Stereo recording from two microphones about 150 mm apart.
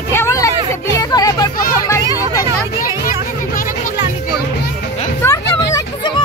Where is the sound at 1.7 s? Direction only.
20° left (ahead or behind).